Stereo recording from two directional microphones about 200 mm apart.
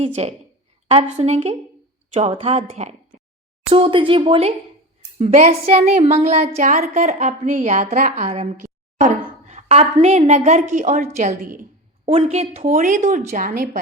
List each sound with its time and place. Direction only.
0.0 s a woman's voice: 30° right (ahead or behind)